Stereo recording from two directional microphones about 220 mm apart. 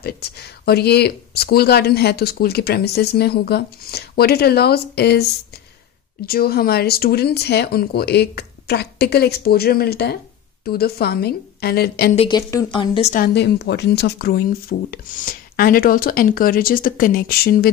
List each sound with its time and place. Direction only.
0.0 s speech: 45° left (ahead or behind)
6.2 s speech: 45° left (ahead or behind)
12.2 s a woman's voice: 20° left (ahead or behind)
13.1 s speech: 45° left (ahead or behind)